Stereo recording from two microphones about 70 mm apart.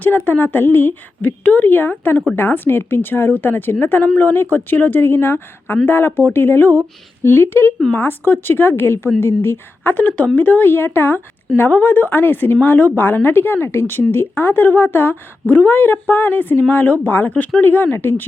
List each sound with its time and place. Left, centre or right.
0.3 s a woman's voice: left